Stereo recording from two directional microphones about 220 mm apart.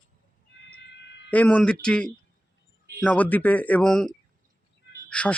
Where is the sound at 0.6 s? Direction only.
55° left (ahead or behind).